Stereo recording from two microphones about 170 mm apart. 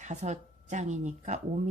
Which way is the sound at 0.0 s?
45° right (ahead or behind).